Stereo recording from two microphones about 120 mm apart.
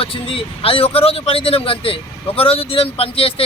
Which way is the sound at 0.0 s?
50° left (ahead or behind).